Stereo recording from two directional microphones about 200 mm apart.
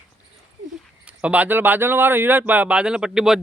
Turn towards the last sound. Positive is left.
turn(degrees=-5)  # may be behind; listen again after turning